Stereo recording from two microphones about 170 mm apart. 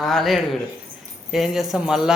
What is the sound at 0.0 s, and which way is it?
Speech, centre (ahead or behind).